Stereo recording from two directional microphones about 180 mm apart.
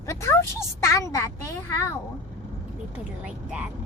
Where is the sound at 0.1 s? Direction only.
15° left (ahead or behind).